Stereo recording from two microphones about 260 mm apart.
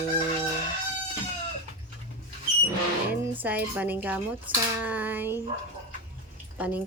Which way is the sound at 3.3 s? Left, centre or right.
Centre.